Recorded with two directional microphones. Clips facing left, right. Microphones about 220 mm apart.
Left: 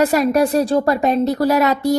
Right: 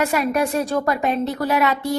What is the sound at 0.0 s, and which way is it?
A woman's voice, 35° left (ahead or behind).